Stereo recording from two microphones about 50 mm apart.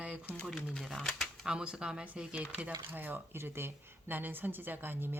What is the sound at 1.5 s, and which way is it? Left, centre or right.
Speech, centre.